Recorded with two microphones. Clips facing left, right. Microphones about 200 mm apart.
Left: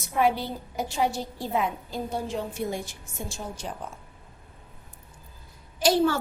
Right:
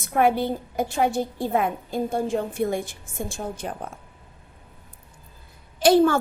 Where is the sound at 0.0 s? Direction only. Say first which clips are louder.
Right 4 dB; 50° right (ahead or behind).